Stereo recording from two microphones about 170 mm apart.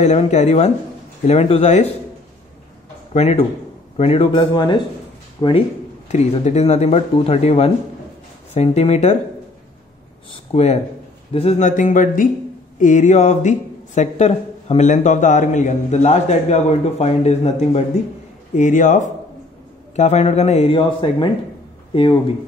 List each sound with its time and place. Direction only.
0.0 s speech: 45° left (ahead or behind)
3.1 s speech: 40° left (ahead or behind); by 5.5 s 25° left (ahead or behind)
6.0 s speech: 40° left (ahead or behind)
10.3 s speech: 40° left (ahead or behind)